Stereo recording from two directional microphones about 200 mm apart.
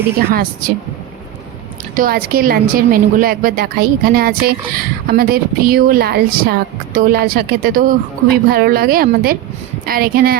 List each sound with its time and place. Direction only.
0.2 s a woman's voice: 50° right (ahead or behind)
1.8 s a woman's voice: 45° right (ahead or behind)